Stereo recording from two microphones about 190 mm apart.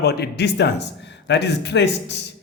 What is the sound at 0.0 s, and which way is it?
Speech, 60° left (ahead or behind).